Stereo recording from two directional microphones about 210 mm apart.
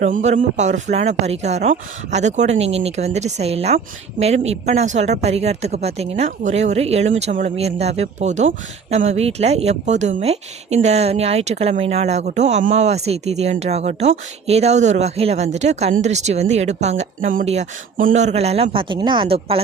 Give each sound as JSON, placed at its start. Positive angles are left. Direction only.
{"t": 0.0, "sound": "speech", "side_deg": -35}